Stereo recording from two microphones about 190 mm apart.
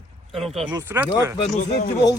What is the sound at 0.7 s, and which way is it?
Speech, 15° right (ahead or behind).